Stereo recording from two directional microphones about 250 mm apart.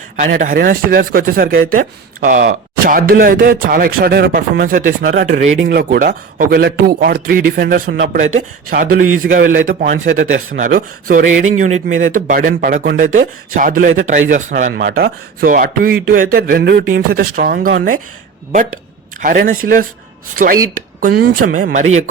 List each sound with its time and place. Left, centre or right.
0.2 s a man's voice: right
19.2 s speech: right
21.0 s speech: right